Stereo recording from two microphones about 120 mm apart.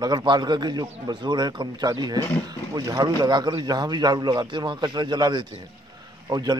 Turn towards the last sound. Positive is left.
turn(degrees=-35)  # may be behind; listen again after turning